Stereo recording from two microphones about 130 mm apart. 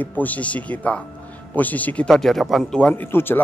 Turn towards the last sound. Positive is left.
turn(degrees=15)  # may be behind; listen again after turning